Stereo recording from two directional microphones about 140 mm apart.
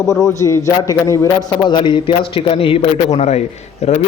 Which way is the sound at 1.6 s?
35° left (ahead or behind).